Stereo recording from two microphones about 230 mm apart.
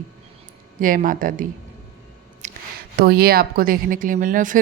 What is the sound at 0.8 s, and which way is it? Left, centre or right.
Speech, right.